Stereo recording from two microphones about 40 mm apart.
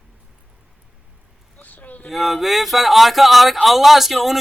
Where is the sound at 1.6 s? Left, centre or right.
Left.